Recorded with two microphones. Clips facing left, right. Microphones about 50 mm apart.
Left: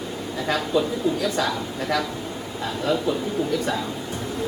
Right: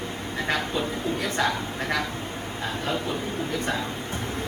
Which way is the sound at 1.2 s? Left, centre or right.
Right.